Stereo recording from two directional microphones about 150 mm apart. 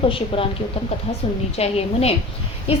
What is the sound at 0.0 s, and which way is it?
Speech, 35° left (ahead or behind).